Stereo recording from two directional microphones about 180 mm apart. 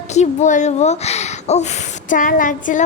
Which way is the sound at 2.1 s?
50° left (ahead or behind).